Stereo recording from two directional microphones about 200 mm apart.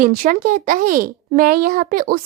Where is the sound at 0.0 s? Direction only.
45° right (ahead or behind).